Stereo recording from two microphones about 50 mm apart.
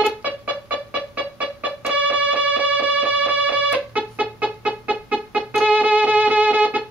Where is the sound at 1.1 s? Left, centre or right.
Right.